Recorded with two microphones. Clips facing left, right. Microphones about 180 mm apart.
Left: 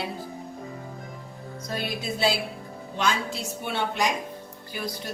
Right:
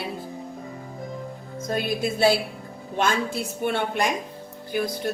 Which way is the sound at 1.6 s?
50° right (ahead or behind).